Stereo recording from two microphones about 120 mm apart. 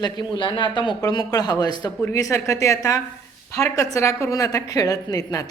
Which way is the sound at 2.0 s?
25° left (ahead or behind).